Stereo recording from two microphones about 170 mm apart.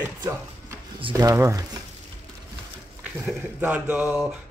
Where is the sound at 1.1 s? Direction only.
15° right (ahead or behind).